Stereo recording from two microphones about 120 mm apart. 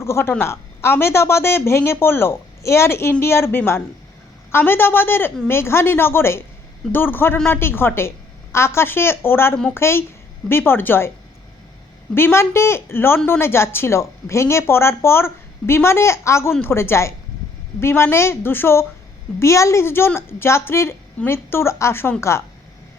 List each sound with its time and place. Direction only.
0.0 s a woman's voice: 20° left (ahead or behind)
12.1 s a woman's voice: 20° left (ahead or behind)